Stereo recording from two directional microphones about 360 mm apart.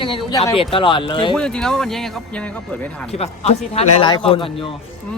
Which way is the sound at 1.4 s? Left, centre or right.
Centre.